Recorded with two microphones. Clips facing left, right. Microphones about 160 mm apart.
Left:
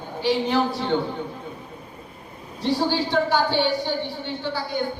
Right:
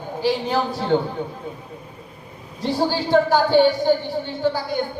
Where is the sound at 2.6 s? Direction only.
45° right (ahead or behind).